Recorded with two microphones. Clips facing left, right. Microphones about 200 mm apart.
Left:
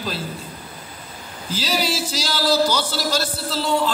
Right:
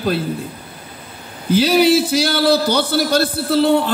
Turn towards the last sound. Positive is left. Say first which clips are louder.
# right 8 dB
turn(degrees=-60)  # may be behind; listen again after turning